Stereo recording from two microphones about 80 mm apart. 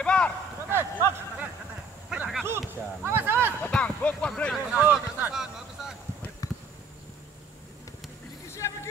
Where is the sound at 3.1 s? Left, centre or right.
Right.